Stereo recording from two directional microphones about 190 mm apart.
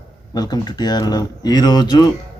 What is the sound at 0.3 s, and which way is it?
Speech, 20° left (ahead or behind).